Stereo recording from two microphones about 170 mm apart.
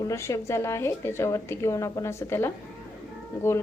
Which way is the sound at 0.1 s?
15° left (ahead or behind).